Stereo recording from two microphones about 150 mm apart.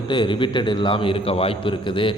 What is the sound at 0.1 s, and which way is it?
A man's voice, 35° left (ahead or behind).